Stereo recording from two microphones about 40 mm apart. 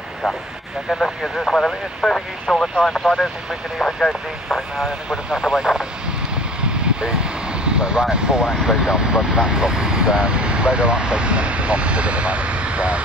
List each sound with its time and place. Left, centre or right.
0.8 s speech: centre
2.4 s speech: centre
5.1 s speech: centre; by 13.0 s right